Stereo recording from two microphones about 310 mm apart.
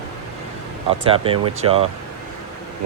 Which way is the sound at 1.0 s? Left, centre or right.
Centre.